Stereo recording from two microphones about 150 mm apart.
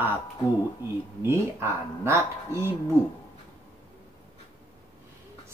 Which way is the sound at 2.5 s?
20° right (ahead or behind).